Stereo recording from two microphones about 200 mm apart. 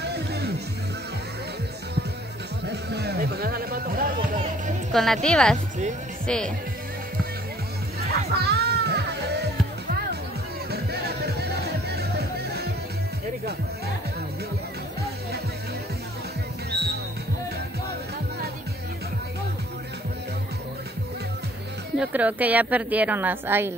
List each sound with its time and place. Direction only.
0.1 s music: 55° right (ahead or behind)
2.6 s music: 55° right (ahead or behind)
4.9 s speech: centre (ahead or behind)
8.3 s music: 55° right (ahead or behind)
10.7 s music: 50° right (ahead or behind)
21.9 s a woman's voice: 5° right (ahead or behind)